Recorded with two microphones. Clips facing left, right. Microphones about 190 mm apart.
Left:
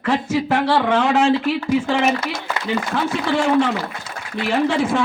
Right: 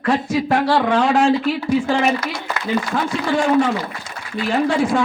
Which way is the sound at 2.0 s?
20° left (ahead or behind).